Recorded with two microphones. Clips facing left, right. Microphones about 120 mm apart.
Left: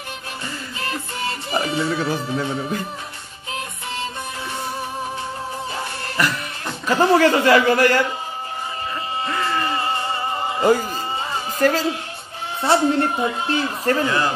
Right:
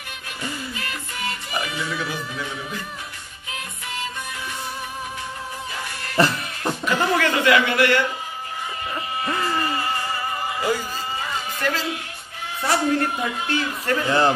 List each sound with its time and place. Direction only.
0.4 s music: 30° left (ahead or behind)
6.1 s music: 30° right (ahead or behind)
6.9 s a woman's voice: 35° left (ahead or behind)
9.6 s music: 25° left (ahead or behind)
10.6 s a sound: 45° left (ahead or behind)
11.6 s a woman's voice: 35° left (ahead or behind)